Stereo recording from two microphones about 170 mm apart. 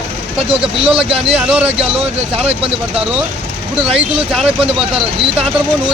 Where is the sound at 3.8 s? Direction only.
35° right (ahead or behind).